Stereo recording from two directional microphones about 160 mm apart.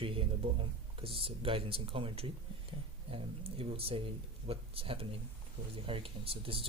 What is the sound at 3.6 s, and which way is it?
Speech, 35° right (ahead or behind).